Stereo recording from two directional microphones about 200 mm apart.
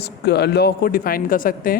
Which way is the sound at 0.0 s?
55° left (ahead or behind).